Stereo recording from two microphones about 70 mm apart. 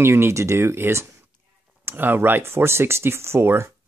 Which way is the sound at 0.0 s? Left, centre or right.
Right.